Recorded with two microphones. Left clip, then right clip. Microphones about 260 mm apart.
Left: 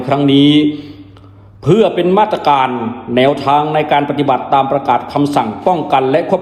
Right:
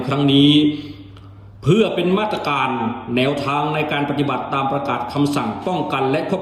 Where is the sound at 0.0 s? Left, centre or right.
Centre.